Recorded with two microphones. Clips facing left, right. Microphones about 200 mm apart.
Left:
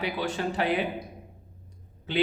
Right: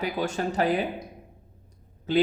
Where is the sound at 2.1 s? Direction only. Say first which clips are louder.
Right 4 dB; 40° right (ahead or behind).